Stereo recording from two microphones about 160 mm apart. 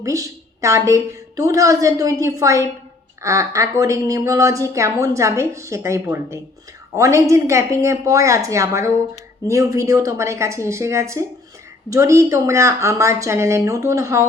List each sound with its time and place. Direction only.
0.0 s a woman's voice: 20° right (ahead or behind)